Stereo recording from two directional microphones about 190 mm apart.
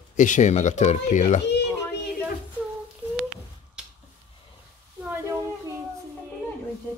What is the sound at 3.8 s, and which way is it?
Finger snapping, 5° right (ahead or behind).